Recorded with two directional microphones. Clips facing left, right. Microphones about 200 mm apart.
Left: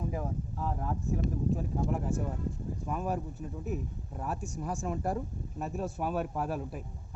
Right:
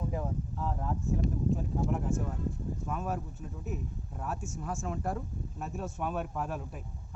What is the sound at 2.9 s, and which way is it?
Speech, 5° left (ahead or behind).